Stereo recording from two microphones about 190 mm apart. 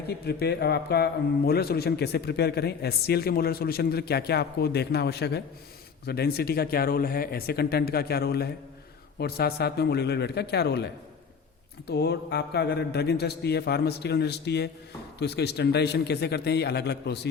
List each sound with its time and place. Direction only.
0.1 s a man's voice: 55° left (ahead or behind)
11.9 s a man's voice: 60° left (ahead or behind)